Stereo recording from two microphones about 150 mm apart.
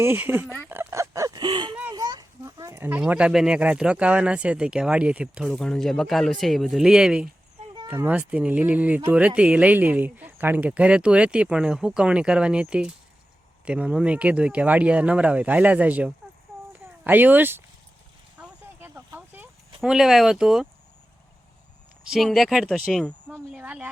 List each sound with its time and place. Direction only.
0.0 s speech: 15° right (ahead or behind)
0.4 s speech: 10° left (ahead or behind)
0.7 s a sound: 15° right (ahead or behind)
3.0 s speech: 5° right (ahead or behind)
18.3 s a sound: 10° right (ahead or behind)
22.1 s speech: centre (ahead or behind)
23.2 s speech: 10° right (ahead or behind)